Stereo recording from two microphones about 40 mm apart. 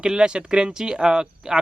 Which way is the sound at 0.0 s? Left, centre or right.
Right.